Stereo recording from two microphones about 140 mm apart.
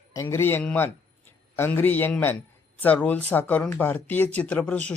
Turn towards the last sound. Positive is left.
turn(degrees=10)  # may be behind; listen again after turning